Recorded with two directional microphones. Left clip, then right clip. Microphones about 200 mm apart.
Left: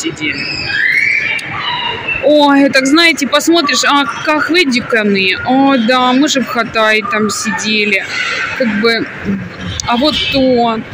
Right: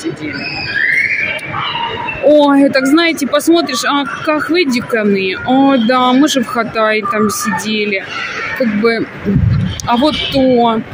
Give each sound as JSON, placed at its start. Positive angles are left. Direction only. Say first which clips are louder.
{"t": 2.2, "sound": "speech", "louder": "even", "side_deg": -5}
{"t": 9.8, "sound": "speech", "louder": "left 1 dB", "side_deg": -10}